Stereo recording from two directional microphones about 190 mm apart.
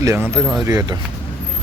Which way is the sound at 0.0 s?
10° right (ahead or behind).